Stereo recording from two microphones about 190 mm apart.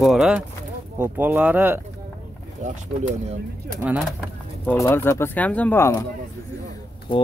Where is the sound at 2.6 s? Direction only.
40° right (ahead or behind).